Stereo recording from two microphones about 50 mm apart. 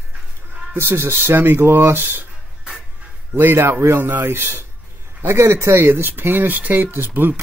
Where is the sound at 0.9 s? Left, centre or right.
Right.